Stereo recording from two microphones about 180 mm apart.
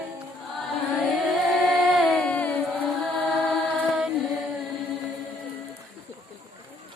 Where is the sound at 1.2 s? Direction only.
Centre (ahead or behind).